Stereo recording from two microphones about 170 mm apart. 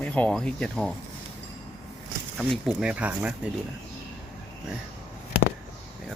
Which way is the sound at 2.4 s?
Centre (ahead or behind).